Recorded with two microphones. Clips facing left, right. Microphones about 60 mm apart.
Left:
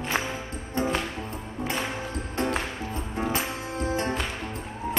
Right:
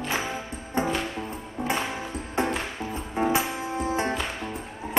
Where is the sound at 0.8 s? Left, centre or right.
Right.